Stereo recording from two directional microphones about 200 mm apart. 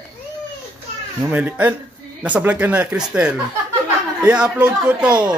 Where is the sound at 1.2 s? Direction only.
10° right (ahead or behind).